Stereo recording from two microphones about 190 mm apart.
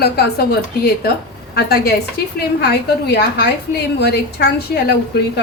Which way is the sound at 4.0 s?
60° left (ahead or behind).